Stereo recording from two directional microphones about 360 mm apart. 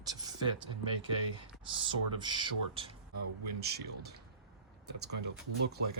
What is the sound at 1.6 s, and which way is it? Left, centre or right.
Speech, centre.